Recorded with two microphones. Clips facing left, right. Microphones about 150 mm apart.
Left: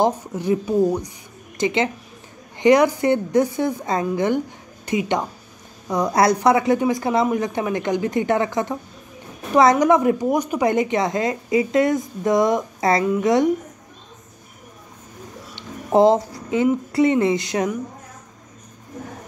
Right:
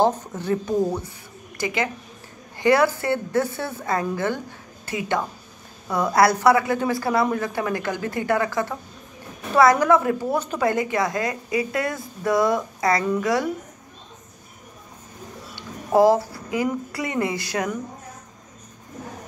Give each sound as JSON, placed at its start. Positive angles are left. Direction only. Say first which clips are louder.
{"t": 0.0, "sound": "a woman's voice", "louder": "left 1 dB", "side_deg": 10}
{"t": 1.6, "sound": "a woman's voice", "louder": "left 5 dB", "side_deg": 25}
{"t": 15.5, "sound": "a sound", "louder": "left 2 dB", "side_deg": 20}
{"t": 16.9, "sound": "a woman's voice", "louder": "left 8 dB", "side_deg": 25}